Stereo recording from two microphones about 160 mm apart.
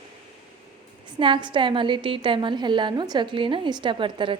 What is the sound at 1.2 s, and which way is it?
A woman's voice, 30° right (ahead or behind).